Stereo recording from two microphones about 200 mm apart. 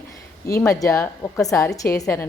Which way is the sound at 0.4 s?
15° left (ahead or behind).